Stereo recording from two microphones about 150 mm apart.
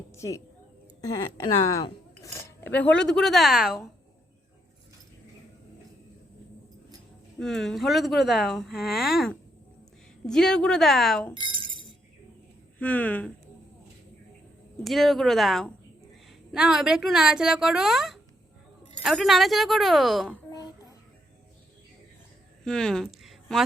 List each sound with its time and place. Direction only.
0.1 s speech: 20° left (ahead or behind); by 3.8 s 5° right (ahead or behind)
7.3 s speech: 5° left (ahead or behind)
11.3 s chink: 35° right (ahead or behind)
12.8 s speech: 10° left (ahead or behind)
14.8 s speech: centre (ahead or behind)
20.5 s child singing: 25° left (ahead or behind)
22.6 s speech: 5° left (ahead or behind)